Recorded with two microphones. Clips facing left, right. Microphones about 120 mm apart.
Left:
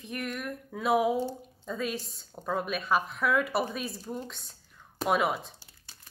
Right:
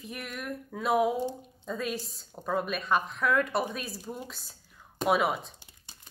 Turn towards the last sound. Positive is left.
turn(degrees=-20)  # may be behind; listen again after turning